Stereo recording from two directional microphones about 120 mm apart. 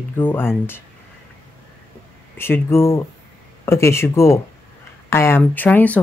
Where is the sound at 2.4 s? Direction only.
20° left (ahead or behind).